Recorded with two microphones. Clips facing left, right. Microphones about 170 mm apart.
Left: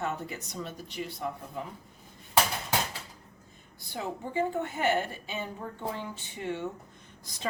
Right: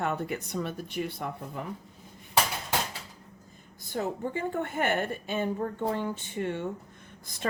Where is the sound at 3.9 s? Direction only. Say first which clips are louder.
Right 3 dB; 50° right (ahead or behind).